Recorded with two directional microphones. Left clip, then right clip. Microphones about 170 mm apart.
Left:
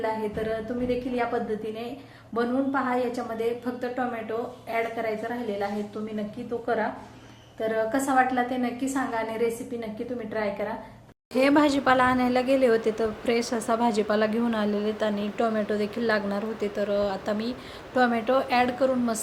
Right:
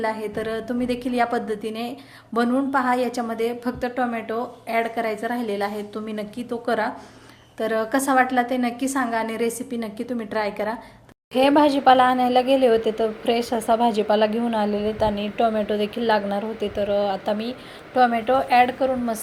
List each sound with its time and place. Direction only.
0.0 s a woman's voice: 65° right (ahead or behind); by 5.6 s 85° right
7.6 s a woman's voice: 70° right (ahead or behind)
11.3 s a woman's voice: 10° right (ahead or behind)